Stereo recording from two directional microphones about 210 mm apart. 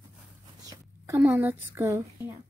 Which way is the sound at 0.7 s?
15° right (ahead or behind).